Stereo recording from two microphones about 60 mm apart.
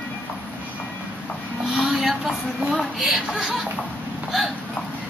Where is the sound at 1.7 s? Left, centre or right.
Centre.